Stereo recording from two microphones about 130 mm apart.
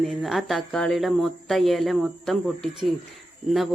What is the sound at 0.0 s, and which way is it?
Speech, centre (ahead or behind).